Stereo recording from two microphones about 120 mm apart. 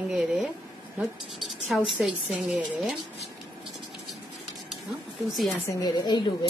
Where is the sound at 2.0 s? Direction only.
5° right (ahead or behind).